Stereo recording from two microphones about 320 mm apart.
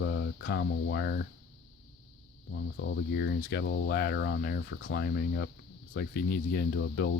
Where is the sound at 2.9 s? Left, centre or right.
Left.